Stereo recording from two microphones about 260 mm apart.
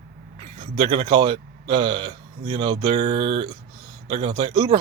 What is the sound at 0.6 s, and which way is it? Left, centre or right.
Speech, centre.